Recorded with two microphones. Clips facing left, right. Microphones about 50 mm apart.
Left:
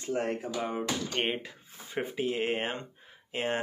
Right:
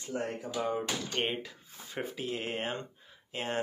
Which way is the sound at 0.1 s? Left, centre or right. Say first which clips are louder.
Left 5 dB; left.